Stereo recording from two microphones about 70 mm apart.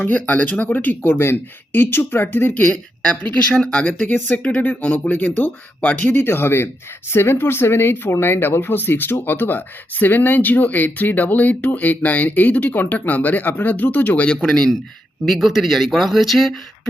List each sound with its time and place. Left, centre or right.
0.0 s speech: left
2.6 s speech: centre
6.1 s speech: left
14.3 s speech: centre